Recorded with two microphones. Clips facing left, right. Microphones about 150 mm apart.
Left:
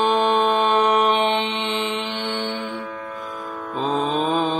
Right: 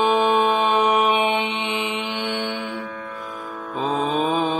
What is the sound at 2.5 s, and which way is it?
Music, 50° left (ahead or behind).